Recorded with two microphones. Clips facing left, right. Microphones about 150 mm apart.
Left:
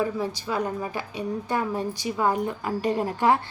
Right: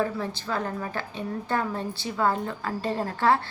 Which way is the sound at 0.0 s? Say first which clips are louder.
Left 2 dB; 15° left (ahead or behind).